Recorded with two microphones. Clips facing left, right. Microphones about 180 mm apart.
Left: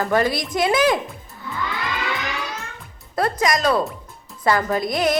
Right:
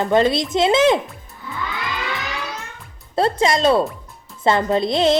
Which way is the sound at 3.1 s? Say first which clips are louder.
Right 3 dB; 25° right (ahead or behind).